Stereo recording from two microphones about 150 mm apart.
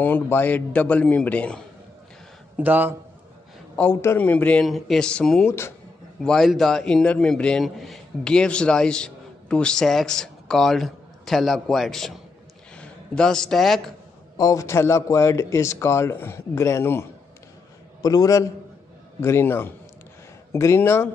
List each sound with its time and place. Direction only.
0.0 s speech: 10° left (ahead or behind)
2.5 s speech: 10° right (ahead or behind)
3.7 s a man's voice: 15° left (ahead or behind)
14.3 s a man's voice: 25° left (ahead or behind)